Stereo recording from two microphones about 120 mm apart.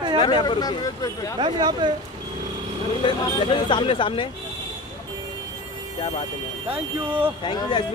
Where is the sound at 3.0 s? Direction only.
40° left (ahead or behind).